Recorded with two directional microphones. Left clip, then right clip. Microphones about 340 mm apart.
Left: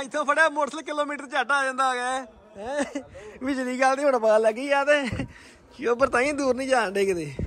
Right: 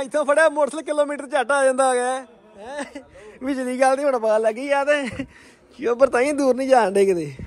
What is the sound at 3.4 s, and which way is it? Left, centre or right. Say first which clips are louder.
Speech: right 4 dB; centre.